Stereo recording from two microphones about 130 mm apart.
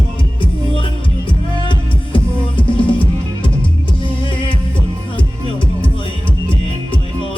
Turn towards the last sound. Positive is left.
turn(degrees=40)  # may be behind; listen again after turning